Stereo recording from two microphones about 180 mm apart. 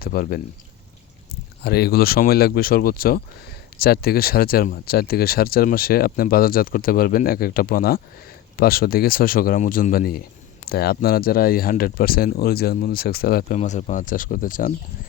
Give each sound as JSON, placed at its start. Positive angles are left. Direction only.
{"t": 0.0, "sound": "speech", "side_deg": 55}
{"t": 1.6, "sound": "speech", "side_deg": 65}
{"t": 13.6, "sound": "speech", "side_deg": 40}